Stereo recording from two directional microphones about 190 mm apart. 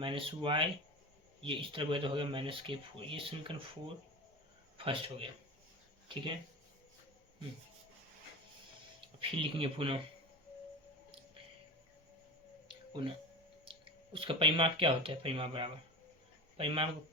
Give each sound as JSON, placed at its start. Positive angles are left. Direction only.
{"t": 0.0, "sound": "speech", "side_deg": -25}
{"t": 9.0, "sound": "speech", "side_deg": -30}
{"t": 13.7, "sound": "speech", "side_deg": -30}